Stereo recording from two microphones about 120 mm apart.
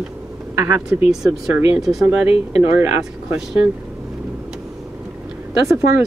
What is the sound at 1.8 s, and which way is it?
Speech, 5° right (ahead or behind).